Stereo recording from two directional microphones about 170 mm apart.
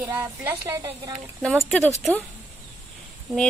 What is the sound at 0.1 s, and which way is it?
Speech, 10° right (ahead or behind).